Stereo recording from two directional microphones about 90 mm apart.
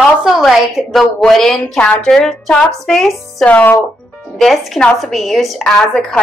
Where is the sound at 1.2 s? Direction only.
5° left (ahead or behind).